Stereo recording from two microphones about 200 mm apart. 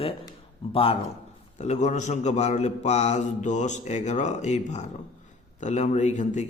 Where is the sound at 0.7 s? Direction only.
25° left (ahead or behind).